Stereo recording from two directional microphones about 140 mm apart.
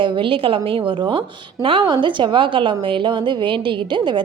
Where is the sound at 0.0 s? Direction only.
35° right (ahead or behind).